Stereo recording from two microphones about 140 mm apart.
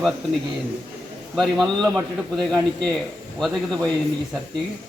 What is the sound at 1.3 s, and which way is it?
A man's voice, centre (ahead or behind).